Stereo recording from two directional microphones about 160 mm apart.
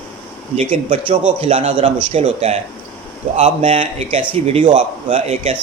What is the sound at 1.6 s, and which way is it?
A man's voice, 50° right (ahead or behind).